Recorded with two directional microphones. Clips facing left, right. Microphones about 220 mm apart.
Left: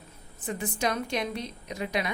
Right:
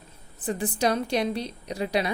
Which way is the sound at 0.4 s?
35° right (ahead or behind).